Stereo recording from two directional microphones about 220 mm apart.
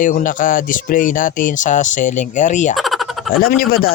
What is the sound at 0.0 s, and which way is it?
Speech, 35° left (ahead or behind).